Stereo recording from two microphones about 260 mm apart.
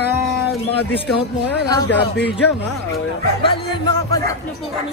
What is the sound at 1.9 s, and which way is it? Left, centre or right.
Speech, left.